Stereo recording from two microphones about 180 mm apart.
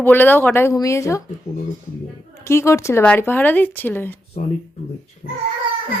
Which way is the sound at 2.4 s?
15° left (ahead or behind).